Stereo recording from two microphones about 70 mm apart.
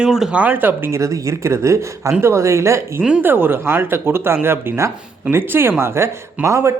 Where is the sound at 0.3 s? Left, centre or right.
Right.